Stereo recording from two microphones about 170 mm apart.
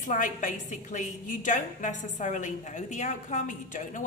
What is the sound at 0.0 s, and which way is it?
A woman's voice, 50° left (ahead or behind).